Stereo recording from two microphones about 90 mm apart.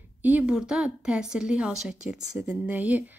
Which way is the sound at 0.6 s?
10° right (ahead or behind).